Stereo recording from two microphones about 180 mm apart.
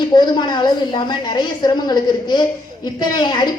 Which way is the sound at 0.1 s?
25° left (ahead or behind).